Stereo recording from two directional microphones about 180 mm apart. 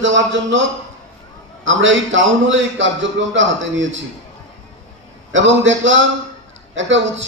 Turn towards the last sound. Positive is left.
turn(degrees=-90)